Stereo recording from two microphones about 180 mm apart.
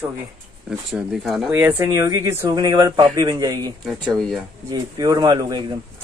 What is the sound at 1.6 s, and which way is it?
Speech, 15° right (ahead or behind).